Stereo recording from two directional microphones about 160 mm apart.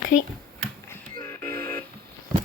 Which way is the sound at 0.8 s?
15° left (ahead or behind).